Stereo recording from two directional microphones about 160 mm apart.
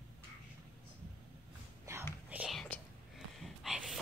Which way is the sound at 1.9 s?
20° right (ahead or behind).